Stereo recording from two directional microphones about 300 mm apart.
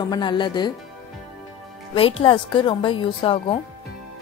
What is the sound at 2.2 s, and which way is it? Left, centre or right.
Speech, centre.